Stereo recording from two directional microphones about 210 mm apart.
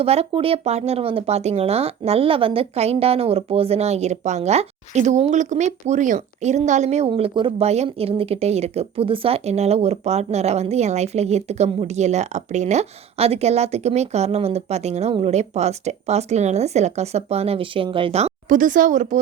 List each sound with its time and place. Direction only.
0.0 s speech: 30° right (ahead or behind)